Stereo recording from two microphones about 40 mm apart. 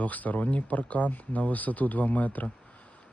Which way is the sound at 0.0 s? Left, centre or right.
Left.